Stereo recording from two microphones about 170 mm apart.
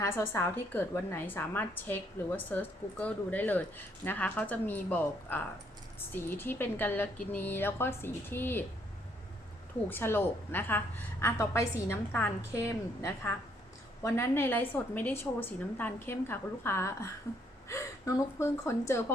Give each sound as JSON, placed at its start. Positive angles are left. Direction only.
{"t": 0.0, "sound": "a woman's voice", "side_deg": 15}
{"t": 9.9, "sound": "a woman's voice", "side_deg": 15}